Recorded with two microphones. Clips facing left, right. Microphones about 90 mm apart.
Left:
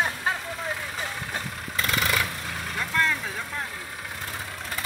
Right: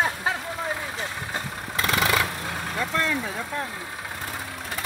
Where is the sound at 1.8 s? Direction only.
45° right (ahead or behind).